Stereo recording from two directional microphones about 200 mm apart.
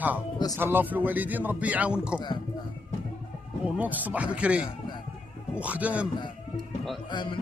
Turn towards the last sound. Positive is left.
turn(degrees=25)  # may be behind; listen again after turning